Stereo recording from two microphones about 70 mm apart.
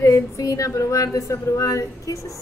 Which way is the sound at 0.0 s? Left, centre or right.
Left.